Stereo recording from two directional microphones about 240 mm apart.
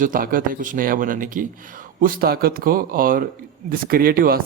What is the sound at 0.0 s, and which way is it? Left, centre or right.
Speech, right.